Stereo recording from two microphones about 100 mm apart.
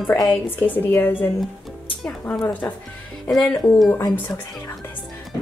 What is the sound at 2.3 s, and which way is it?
Speech, 10° left (ahead or behind).